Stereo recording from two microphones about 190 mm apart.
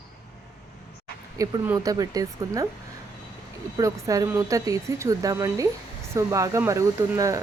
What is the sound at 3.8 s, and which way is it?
Speech, 15° right (ahead or behind).